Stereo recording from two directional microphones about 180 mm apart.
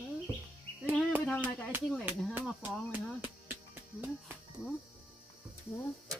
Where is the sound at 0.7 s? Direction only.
10° left (ahead or behind).